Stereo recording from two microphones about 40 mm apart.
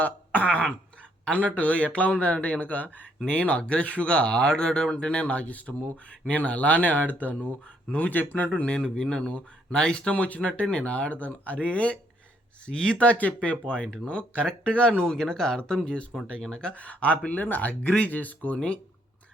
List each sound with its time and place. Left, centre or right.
0.0 s speech: left
8.4 s speech: left
10.2 s speech: left
13.0 s speech: left
14.9 s speech: centre
16.7 s speech: left
18.5 s speech: left